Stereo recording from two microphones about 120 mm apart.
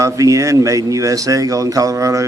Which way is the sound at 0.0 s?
25° right (ahead or behind).